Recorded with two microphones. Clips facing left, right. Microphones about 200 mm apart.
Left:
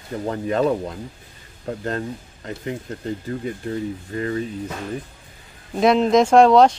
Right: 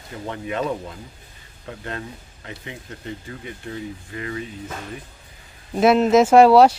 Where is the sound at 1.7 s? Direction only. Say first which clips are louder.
Left 7 dB; 40° left (ahead or behind).